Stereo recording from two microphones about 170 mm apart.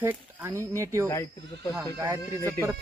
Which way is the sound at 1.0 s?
20° left (ahead or behind).